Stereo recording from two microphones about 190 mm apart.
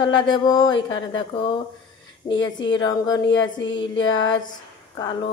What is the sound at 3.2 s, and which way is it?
Music, 80° left.